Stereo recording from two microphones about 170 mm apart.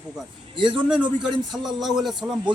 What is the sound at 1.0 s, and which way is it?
Speech, 25° right (ahead or behind).